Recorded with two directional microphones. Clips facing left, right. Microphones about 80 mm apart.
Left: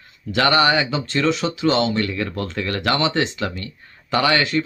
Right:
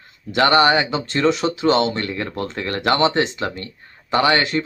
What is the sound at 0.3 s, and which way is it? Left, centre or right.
Speech, right.